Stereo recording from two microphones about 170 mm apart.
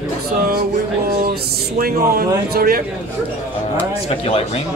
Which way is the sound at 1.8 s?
60° right (ahead or behind).